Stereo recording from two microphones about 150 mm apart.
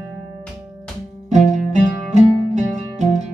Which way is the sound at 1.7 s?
50° right (ahead or behind).